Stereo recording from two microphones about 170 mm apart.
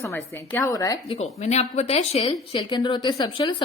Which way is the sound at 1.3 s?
40° left (ahead or behind).